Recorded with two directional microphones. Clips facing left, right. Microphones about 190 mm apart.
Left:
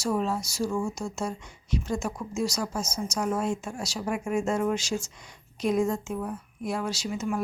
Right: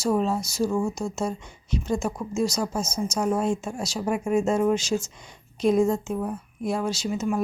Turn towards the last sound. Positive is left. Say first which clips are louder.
# right 4 dB
turn(degrees=-25)  # may be behind; listen again after turning